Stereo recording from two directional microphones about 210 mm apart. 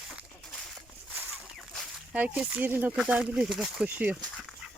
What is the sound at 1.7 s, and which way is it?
Speech, 5° right (ahead or behind).